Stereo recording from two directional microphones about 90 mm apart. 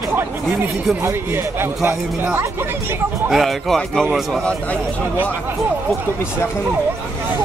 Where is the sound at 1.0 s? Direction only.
25° right (ahead or behind).